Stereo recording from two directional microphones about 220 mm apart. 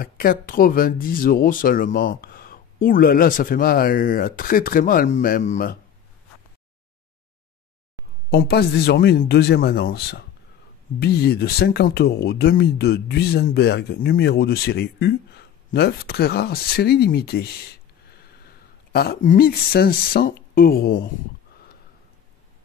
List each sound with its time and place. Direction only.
0.0 s speech: 40° left (ahead or behind)
8.3 s speech: 45° left (ahead or behind)